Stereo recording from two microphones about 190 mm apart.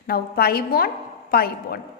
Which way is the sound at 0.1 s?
55° left (ahead or behind).